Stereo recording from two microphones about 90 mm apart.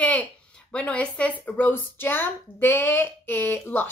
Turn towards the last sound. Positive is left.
turn(degrees=20)  # may be behind; listen again after turning